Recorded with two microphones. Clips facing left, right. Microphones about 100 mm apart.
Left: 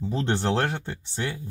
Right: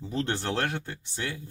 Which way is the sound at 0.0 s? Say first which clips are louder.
Left 4 dB; 20° left (ahead or behind).